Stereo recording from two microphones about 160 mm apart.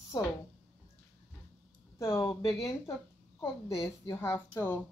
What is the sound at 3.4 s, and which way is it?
Speech, 35° left (ahead or behind).